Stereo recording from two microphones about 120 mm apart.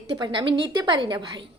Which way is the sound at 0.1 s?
45° right (ahead or behind).